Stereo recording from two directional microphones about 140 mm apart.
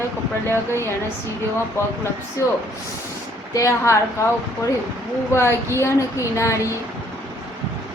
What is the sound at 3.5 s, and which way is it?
Speech, 20° left (ahead or behind).